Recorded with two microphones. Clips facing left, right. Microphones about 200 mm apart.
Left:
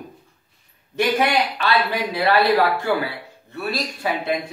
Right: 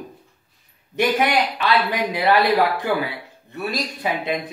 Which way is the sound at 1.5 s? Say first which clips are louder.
Right 1 dB; 15° right (ahead or behind).